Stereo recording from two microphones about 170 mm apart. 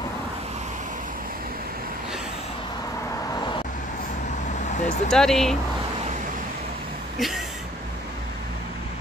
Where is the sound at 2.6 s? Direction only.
20° left (ahead or behind).